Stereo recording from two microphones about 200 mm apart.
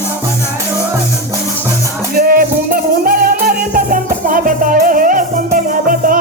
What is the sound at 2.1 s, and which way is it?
Music, 45° right (ahead or behind).